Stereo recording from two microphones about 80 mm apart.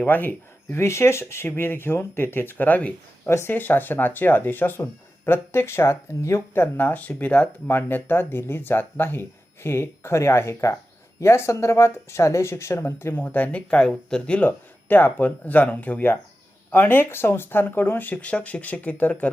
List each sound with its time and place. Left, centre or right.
0.0 s speech: left
0.8 s speech: left
3.2 s speech: left